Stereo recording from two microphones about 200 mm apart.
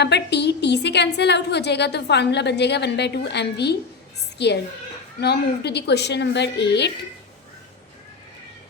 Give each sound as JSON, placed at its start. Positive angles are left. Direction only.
{"t": 0.0, "sound": "a woman's voice", "side_deg": 60}